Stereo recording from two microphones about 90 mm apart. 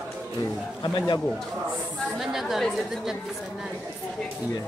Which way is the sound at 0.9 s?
60° left (ahead or behind).